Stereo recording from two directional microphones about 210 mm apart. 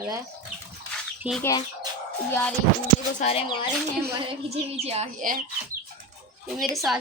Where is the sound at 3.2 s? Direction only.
30° left (ahead or behind).